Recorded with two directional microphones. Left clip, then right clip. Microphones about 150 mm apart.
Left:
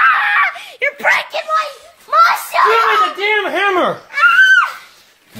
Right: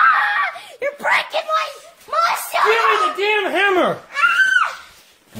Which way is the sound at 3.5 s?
20° right (ahead or behind).